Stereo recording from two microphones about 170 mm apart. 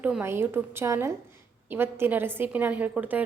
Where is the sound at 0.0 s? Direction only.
10° right (ahead or behind).